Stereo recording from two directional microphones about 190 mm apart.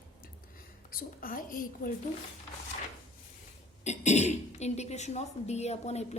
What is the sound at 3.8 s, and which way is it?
Speech, 35° left (ahead or behind).